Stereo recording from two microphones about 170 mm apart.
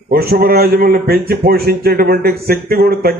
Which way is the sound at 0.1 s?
65° right (ahead or behind).